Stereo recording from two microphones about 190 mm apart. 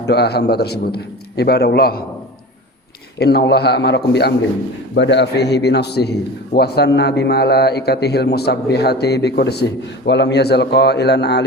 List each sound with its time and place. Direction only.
0.0 s a man's voice: 60° left (ahead or behind)
3.2 s a man's voice: 60° left (ahead or behind)